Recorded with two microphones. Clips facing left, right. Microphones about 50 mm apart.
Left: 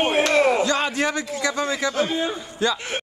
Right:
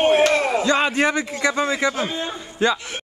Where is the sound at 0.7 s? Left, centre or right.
Right.